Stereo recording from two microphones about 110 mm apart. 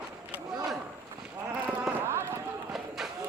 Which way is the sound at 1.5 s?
20° right (ahead or behind).